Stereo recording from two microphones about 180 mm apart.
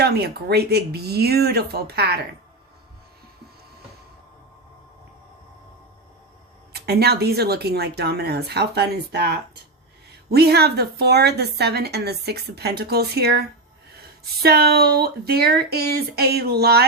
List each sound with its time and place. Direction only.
0.0 s a woman's voice: 65° right (ahead or behind)
6.7 s a woman's voice: 65° right (ahead or behind)
10.3 s a woman's voice: 60° right (ahead or behind)
14.4 s a woman's voice: 60° right (ahead or behind)